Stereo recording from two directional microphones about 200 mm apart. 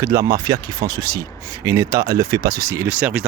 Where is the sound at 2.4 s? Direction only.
50° right (ahead or behind).